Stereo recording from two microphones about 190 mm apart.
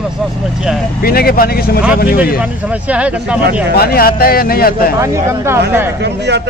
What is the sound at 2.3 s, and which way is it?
Speech, 10° right (ahead or behind).